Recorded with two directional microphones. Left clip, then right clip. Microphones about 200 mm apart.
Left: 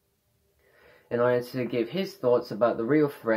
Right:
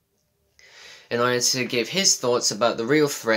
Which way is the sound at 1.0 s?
35° right (ahead or behind).